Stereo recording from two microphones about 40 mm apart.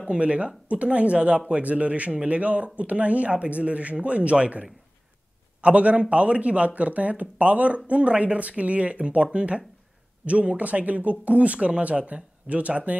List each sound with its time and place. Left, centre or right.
0.0 s speech: right